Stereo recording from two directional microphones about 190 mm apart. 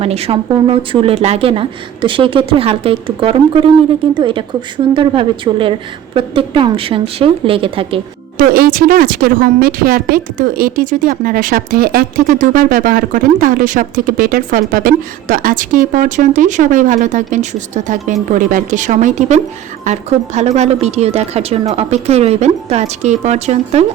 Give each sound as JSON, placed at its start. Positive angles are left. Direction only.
{"t": 0.0, "sound": "speech", "side_deg": -30}
{"t": 8.4, "sound": "speech", "side_deg": -50}